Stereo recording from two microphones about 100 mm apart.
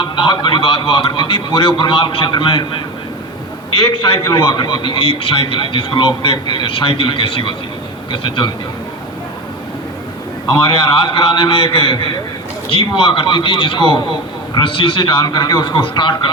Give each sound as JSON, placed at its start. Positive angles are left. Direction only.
{"t": 0.0, "sound": "a man's voice", "side_deg": 50}
{"t": 3.8, "sound": "a man's voice", "side_deg": 50}
{"t": 10.5, "sound": "a man's voice", "side_deg": 55}